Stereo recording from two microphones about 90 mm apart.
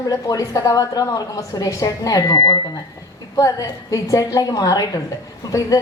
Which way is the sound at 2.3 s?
65° left (ahead or behind).